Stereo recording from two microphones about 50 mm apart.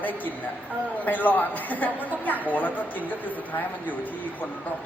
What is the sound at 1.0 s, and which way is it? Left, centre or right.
Speech, left.